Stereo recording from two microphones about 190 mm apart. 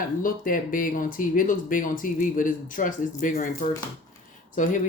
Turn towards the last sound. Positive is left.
turn(degrees=45)  # may be behind; listen again after turning